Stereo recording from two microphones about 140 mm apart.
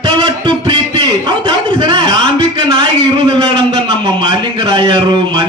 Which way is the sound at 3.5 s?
40° right (ahead or behind).